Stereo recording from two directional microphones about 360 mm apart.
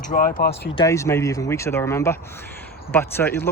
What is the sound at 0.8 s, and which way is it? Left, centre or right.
Speech, centre.